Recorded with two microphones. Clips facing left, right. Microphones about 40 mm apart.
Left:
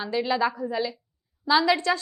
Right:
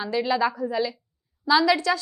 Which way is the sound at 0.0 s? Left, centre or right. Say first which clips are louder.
Right 1 dB; centre.